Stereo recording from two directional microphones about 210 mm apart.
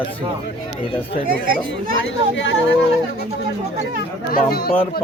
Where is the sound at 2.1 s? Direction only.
65° left (ahead or behind).